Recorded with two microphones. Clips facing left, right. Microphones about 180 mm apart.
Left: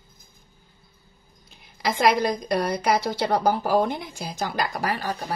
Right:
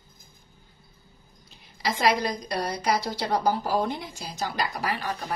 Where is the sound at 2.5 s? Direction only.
55° left (ahead or behind).